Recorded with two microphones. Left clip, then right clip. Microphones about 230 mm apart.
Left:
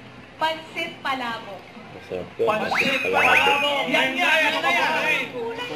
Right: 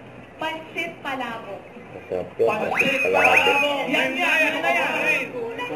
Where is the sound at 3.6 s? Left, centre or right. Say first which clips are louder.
Left 1 dB; centre.